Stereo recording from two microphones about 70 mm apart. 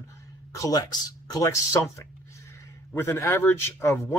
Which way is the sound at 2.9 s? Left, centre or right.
Left.